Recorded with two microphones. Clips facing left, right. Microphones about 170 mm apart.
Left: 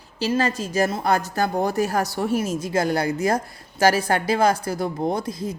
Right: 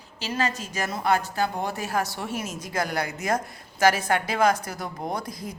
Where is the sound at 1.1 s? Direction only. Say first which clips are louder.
Left 3 dB; 40° left (ahead or behind).